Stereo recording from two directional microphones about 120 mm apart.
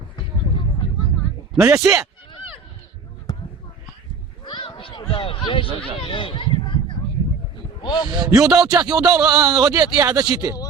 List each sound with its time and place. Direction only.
1.5 s speech: 5° right (ahead or behind)
4.4 s a sound: 45° left (ahead or behind)
6.0 s speech: 45° left (ahead or behind)
7.8 s a man's voice: 40° left (ahead or behind)
8.1 s speech: 35° right (ahead or behind)
8.4 s speech: 5° right (ahead or behind)
8.6 s speech: 35° right (ahead or behind)